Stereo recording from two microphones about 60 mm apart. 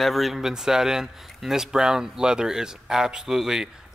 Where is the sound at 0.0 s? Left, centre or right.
Centre.